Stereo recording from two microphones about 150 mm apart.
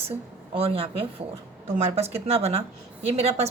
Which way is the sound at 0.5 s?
40° right (ahead or behind).